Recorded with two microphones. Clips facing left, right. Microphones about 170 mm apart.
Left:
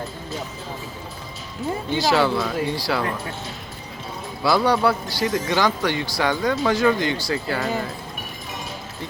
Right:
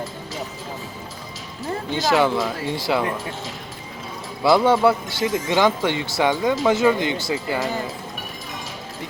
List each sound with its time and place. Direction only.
2.0 s speech: 20° right (ahead or behind)
4.4 s speech: 20° right (ahead or behind)